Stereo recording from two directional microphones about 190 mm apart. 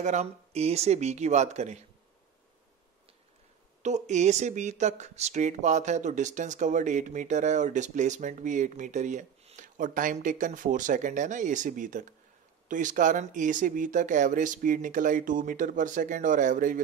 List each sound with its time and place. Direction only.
0.0 s speech: 35° right (ahead or behind)
3.8 s speech: 40° right (ahead or behind)